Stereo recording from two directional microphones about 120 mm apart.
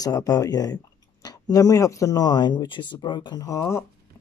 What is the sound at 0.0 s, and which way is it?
Speech, 30° left (ahead or behind).